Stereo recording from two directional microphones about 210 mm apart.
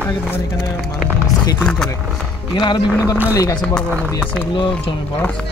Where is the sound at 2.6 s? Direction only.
20° left (ahead or behind).